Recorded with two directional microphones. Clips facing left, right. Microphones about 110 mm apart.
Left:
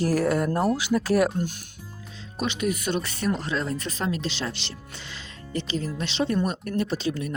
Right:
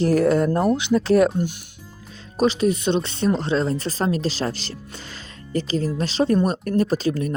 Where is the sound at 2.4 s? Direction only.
35° right (ahead or behind).